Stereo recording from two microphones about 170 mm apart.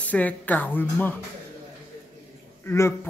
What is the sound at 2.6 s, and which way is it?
Speech, 15° left (ahead or behind).